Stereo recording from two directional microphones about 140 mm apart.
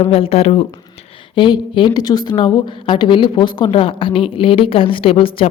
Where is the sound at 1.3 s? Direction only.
35° left (ahead or behind).